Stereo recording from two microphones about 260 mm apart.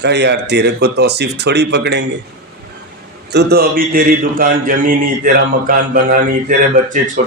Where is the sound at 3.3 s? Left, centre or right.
Right.